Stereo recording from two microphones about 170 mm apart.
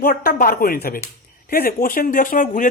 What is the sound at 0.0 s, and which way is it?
Speech, 60° left (ahead or behind).